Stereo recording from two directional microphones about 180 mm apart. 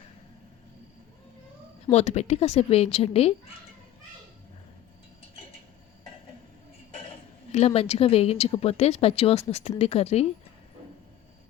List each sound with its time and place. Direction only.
1.9 s speech: 40° left (ahead or behind)
7.5 s speech: 35° left (ahead or behind)